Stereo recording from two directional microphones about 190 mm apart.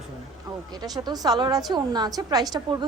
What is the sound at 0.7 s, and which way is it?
A woman's voice, 20° right (ahead or behind).